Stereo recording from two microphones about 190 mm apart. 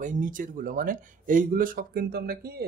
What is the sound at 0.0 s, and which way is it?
Speech, 45° right (ahead or behind).